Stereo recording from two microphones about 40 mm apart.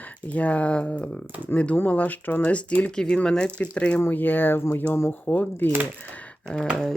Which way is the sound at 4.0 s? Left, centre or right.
Left.